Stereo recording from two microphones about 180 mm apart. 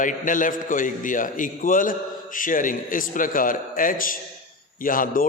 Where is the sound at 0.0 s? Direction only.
45° left (ahead or behind).